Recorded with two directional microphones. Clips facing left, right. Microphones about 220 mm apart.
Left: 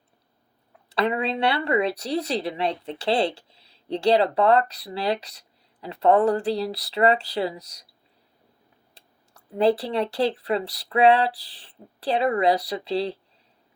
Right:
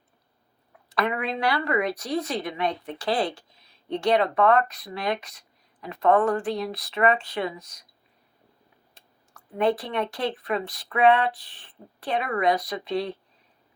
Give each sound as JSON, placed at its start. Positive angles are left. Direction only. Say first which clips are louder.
{"t": 0.9, "sound": "speech", "louder": "left 3 dB", "side_deg": 30}
{"t": 9.6, "sound": "speech", "louder": "left 3 dB", "side_deg": 30}